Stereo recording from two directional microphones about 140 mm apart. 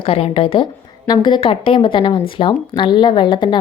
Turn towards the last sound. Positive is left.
turn(degrees=35)  # may be behind; listen again after turning